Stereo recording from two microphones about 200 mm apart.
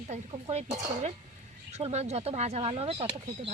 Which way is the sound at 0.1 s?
35° right (ahead or behind).